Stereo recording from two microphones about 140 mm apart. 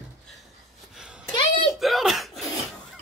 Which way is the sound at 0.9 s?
5° right (ahead or behind).